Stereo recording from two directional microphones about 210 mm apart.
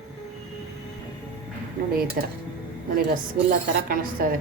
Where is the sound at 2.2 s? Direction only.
45° right (ahead or behind).